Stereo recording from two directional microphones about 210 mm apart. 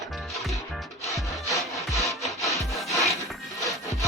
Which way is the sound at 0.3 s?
Centre (ahead or behind).